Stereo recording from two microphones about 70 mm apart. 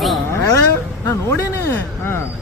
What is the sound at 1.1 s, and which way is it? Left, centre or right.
Speech, left.